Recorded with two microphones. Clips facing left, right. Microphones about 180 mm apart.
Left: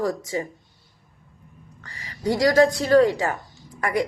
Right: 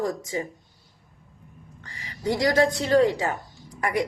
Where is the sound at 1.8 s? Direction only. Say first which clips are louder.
Left 1 dB; 20° right (ahead or behind).